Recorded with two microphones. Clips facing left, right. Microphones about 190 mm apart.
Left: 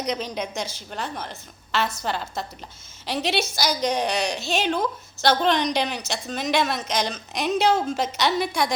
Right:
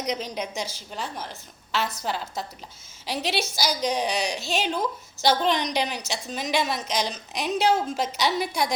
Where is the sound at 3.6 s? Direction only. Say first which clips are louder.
Even; 5° right (ahead or behind).